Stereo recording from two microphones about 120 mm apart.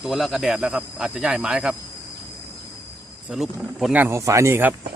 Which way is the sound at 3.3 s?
Centre (ahead or behind).